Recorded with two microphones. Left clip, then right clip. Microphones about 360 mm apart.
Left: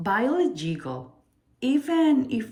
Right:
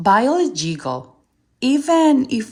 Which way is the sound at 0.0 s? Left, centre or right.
Centre.